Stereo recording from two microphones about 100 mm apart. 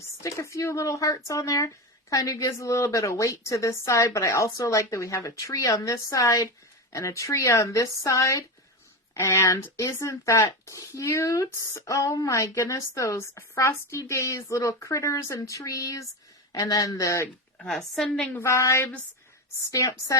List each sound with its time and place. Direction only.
0.2 s speech: 30° left (ahead or behind)
17.6 s a woman's voice: 5° left (ahead or behind)
18.3 s speech: 30° left (ahead or behind)